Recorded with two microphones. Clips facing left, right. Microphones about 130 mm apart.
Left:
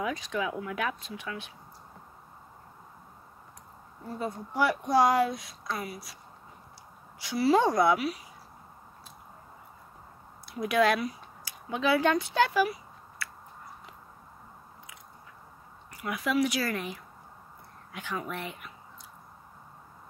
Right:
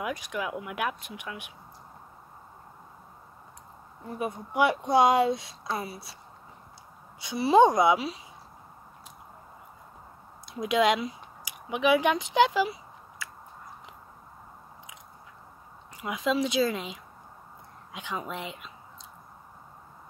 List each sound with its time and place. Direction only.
0.0 s speech: 10° right (ahead or behind)
4.1 s speech: 20° right (ahead or behind)
7.2 s speech: 20° right (ahead or behind)
10.4 s speech: 20° right (ahead or behind)
16.0 s speech: 20° right (ahead or behind)